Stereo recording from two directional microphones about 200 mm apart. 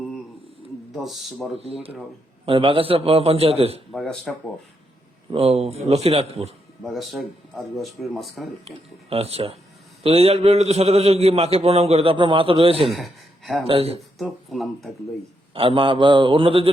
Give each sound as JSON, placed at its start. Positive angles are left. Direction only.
{"t": 0.9, "sound": "speech", "side_deg": 0}
{"t": 1.5, "sound": "a man's voice", "side_deg": -30}
{"t": 3.9, "sound": "speech", "side_deg": 0}
{"t": 5.3, "sound": "a man's voice", "side_deg": -30}
{"t": 6.8, "sound": "speech", "side_deg": 0}
{"t": 8.6, "sound": "a man's voice", "side_deg": -30}
{"t": 12.9, "sound": "speech", "side_deg": 0}
{"t": 13.7, "sound": "a man's voice", "side_deg": -30}
{"t": 14.2, "sound": "speech", "side_deg": 0}
{"t": 15.5, "sound": "a man's voice", "side_deg": -25}